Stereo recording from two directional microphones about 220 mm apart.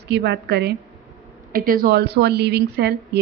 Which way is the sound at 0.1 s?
50° right (ahead or behind).